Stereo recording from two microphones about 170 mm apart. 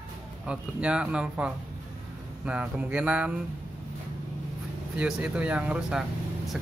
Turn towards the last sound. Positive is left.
turn(degrees=0)  # may be behind; listen again after turning